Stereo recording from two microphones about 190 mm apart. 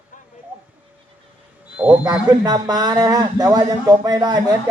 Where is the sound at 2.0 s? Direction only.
20° right (ahead or behind).